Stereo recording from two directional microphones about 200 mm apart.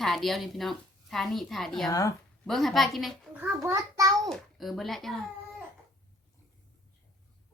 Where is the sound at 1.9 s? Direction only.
15° left (ahead or behind).